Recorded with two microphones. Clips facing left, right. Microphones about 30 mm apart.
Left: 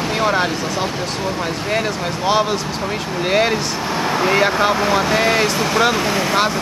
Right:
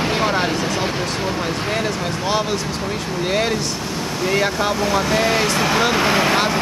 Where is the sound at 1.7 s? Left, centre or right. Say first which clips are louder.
Left 1 dB; centre.